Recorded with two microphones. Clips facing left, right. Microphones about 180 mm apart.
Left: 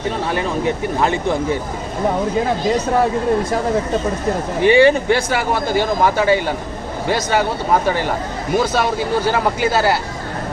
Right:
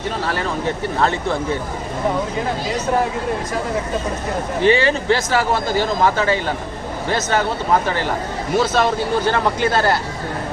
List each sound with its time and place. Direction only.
0.3 s a man's voice: 15° left (ahead or behind)
4.6 s a man's voice: 15° left (ahead or behind)
8.5 s a man's voice: 10° left (ahead or behind)